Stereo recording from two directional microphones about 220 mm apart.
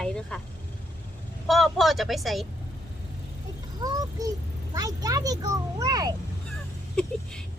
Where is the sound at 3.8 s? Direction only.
15° right (ahead or behind).